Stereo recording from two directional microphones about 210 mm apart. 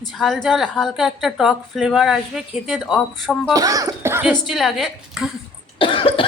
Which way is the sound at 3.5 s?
15° right (ahead or behind).